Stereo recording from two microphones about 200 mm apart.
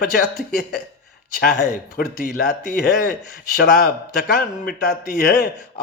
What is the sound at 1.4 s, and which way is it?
Speech, 45° left (ahead or behind).